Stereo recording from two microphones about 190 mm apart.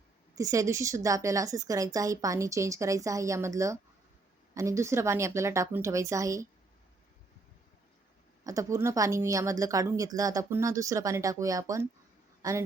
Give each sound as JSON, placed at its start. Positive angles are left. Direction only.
{"t": 0.3, "sound": "a woman's voice", "side_deg": -15}
{"t": 8.4, "sound": "a woman's voice", "side_deg": -15}